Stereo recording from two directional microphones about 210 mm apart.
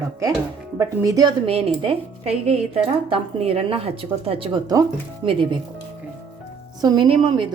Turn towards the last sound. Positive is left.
turn(degrees=-25)  # may be behind; listen again after turning